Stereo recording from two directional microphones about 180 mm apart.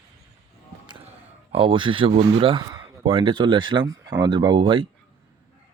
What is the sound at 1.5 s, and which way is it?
Speech, 30° right (ahead or behind).